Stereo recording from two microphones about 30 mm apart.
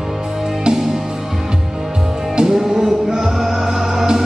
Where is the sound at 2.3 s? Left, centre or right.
Centre.